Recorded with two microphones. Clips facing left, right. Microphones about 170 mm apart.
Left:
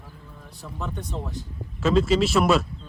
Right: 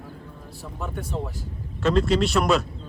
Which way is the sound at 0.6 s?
5° right (ahead or behind).